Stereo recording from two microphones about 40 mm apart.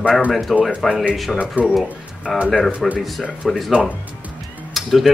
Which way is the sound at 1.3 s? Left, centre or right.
Right.